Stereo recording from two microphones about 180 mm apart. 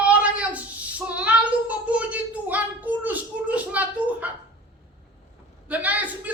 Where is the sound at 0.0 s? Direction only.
10° right (ahead or behind).